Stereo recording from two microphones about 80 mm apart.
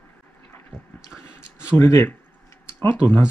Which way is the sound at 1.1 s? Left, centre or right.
Left.